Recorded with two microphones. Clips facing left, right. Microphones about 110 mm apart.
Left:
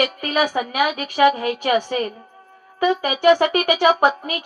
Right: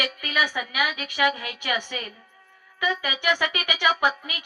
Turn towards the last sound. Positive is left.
turn(degrees=45)  # may be behind; listen again after turning